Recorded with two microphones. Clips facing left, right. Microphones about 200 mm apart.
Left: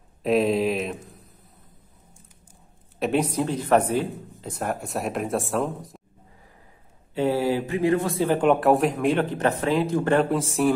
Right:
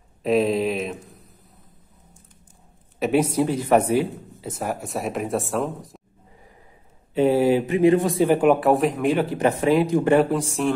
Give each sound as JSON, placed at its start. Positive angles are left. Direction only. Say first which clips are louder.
{"t": 0.2, "sound": "a sound", "louder": "right 1 dB", "side_deg": 0}
{"t": 3.0, "sound": "speech", "louder": "right 3 dB", "side_deg": -5}
{"t": 7.2, "sound": "speech", "louder": "right 5 dB", "side_deg": -15}
{"t": 10.3, "sound": "speech", "louder": "left 1 dB", "side_deg": 5}